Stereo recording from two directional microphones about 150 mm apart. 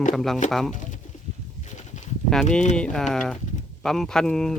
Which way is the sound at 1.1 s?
55° left (ahead or behind).